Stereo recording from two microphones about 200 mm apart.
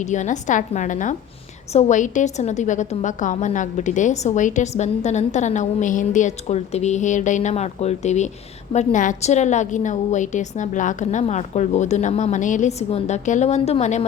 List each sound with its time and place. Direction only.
0.0 s a woman's voice: 35° left (ahead or behind)